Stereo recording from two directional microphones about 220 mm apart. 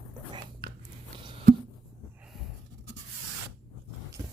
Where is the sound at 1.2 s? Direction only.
25° right (ahead or behind).